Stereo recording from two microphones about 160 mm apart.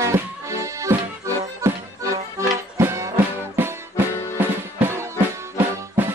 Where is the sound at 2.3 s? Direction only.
20° right (ahead or behind).